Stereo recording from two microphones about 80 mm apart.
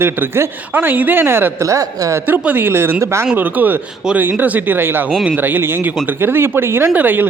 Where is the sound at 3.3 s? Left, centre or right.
Right.